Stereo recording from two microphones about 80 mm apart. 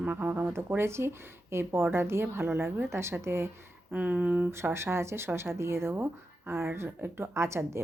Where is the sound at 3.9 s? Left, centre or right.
Centre.